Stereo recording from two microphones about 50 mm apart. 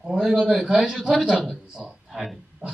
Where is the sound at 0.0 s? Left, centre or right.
Centre.